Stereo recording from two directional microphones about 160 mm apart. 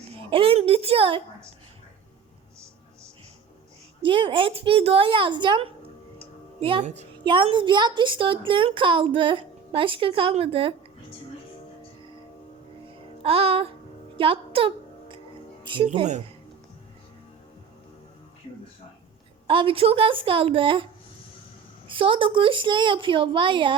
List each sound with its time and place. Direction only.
0.3 s a woman's voice: 35° right (ahead or behind)
4.0 s a woman's voice: 30° right (ahead or behind)
13.2 s a woman's voice: 35° right (ahead or behind)
15.9 s a woman's voice: 30° right (ahead or behind)
19.5 s a woman's voice: 35° right (ahead or behind)
21.8 s a woman's voice: 35° right (ahead or behind)